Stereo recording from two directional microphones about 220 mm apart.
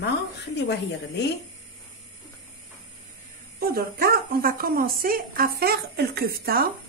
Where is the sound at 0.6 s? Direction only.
50° left (ahead or behind).